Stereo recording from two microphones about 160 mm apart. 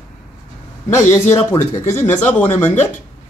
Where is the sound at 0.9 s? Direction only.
15° left (ahead or behind).